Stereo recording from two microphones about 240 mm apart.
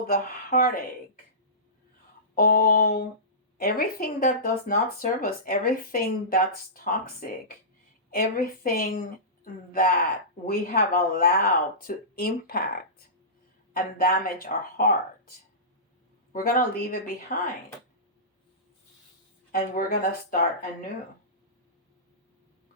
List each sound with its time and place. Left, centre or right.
0.1 s speech: left
2.3 s speech: left
13.7 s speech: left
16.3 s speech: left
19.5 s speech: left